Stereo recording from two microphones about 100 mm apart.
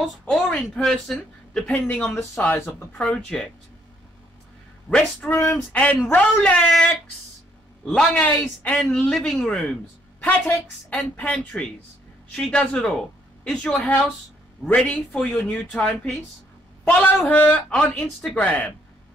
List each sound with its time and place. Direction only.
0.2 s speech: 10° left (ahead or behind)
3.0 s speech: 5° left (ahead or behind)
4.8 s speech: 10° left (ahead or behind)
7.8 s speech: 5° left (ahead or behind)
10.2 s speech: 15° left (ahead or behind)